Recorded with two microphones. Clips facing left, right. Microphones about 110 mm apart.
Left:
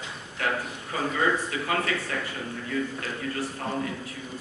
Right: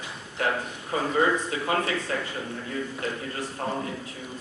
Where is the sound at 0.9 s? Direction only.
30° right (ahead or behind).